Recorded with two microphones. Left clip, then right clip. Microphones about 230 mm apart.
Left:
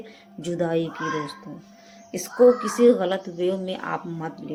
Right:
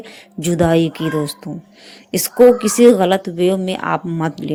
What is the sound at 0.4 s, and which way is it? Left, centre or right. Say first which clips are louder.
Speech: right 10 dB; right.